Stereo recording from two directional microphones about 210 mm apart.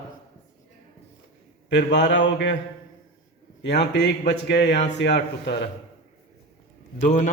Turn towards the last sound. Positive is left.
turn(degrees=35)  # may be behind; listen again after turning